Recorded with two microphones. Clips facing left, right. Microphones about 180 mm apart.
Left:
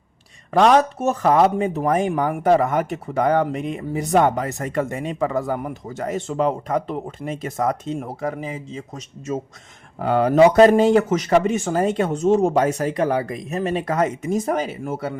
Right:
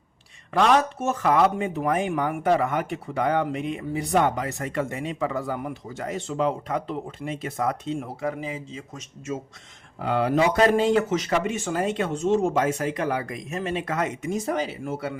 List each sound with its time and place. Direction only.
0.5 s speech: 40° left (ahead or behind)
10.0 s speech: 45° left (ahead or behind)